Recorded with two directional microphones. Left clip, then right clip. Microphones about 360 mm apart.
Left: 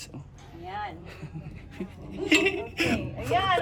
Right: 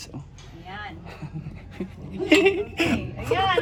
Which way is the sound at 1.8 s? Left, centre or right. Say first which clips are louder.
Right 3 dB; centre.